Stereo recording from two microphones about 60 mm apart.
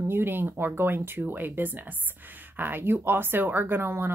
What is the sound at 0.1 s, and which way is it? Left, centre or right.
Speech, right.